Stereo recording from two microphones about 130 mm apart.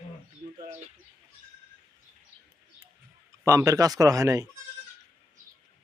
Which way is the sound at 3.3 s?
25° right (ahead or behind).